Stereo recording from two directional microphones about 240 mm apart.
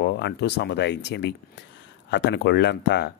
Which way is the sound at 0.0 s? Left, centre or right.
Left.